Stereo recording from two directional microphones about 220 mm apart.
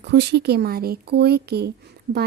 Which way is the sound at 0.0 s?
50° right (ahead or behind).